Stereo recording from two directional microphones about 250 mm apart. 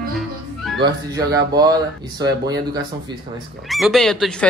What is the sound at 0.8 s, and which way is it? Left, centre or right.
Speech, centre.